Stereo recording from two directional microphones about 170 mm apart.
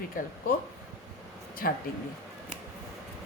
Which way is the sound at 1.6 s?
60° left (ahead or behind).